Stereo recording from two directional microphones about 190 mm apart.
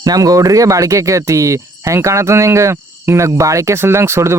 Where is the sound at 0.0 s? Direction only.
20° right (ahead or behind).